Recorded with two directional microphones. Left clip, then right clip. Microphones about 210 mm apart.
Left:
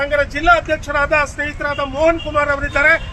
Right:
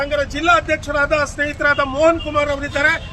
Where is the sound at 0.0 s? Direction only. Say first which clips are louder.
Left 3 dB; 50° right (ahead or behind).